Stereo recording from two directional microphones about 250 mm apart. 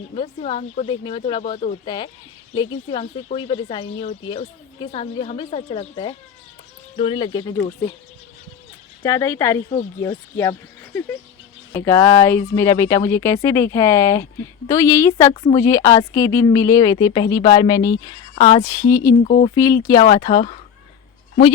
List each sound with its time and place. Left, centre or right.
0.2 s speech: left
9.0 s speech: centre
11.7 s speech: centre
19.2 s speech: left
19.5 s speech: centre